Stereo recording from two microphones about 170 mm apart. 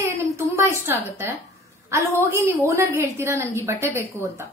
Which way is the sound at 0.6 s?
15° right (ahead or behind).